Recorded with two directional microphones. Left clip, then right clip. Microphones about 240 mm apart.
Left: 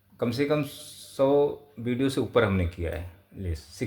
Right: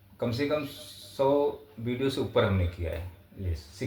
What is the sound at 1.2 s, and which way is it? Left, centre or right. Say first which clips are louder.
Speech: left 3 dB; left.